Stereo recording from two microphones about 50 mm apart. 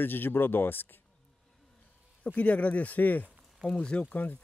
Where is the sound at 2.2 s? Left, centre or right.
Left.